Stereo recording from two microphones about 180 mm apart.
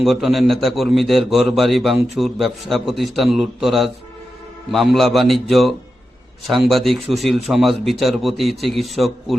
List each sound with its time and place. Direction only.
0.0 s speech: centre (ahead or behind)